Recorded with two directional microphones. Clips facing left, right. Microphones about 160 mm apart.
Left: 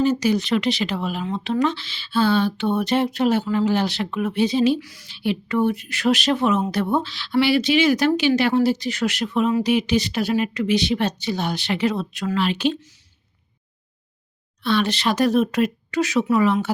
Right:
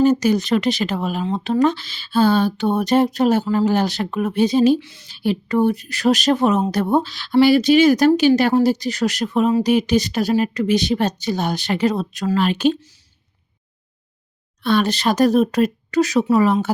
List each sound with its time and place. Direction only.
0.0 s speech: 45° right (ahead or behind)
4.8 s a woman's voice: 25° right (ahead or behind)
5.0 s speech: 40° right (ahead or behind)
14.6 s speech: 45° right (ahead or behind)